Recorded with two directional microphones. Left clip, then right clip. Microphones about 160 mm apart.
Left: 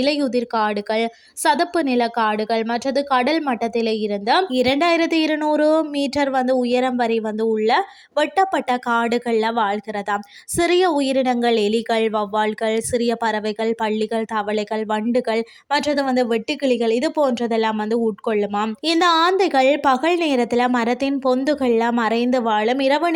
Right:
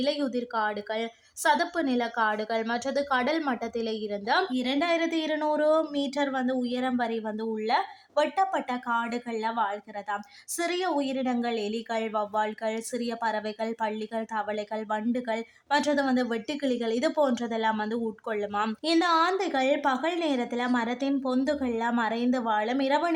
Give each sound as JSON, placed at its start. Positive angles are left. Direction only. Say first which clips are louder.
{"t": 0.0, "sound": "speech", "louder": "left 9 dB", "side_deg": 40}
{"t": 4.5, "sound": "a woman's voice", "louder": "left 10 dB", "side_deg": 50}